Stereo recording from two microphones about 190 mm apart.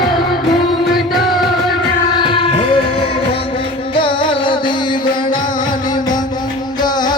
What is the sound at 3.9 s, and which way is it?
Music, 25° left (ahead or behind).